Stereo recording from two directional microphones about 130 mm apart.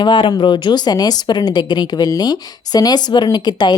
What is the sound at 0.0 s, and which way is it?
A woman's voice, 35° left (ahead or behind).